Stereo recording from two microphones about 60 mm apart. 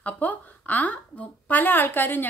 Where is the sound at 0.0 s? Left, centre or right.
Left.